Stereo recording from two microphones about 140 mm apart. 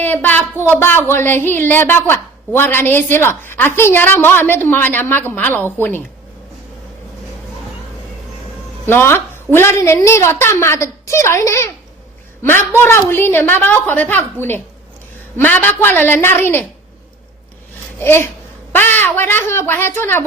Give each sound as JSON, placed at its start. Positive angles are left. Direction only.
{"t": 0.0, "sound": "a woman's voice", "side_deg": 15}
{"t": 8.9, "sound": "a woman's voice", "side_deg": 15}
{"t": 15.4, "sound": "a woman's voice", "side_deg": 10}
{"t": 18.0, "sound": "a woman's voice", "side_deg": 15}